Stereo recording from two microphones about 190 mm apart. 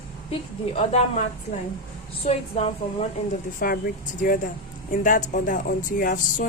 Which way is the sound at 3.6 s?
50° left (ahead or behind).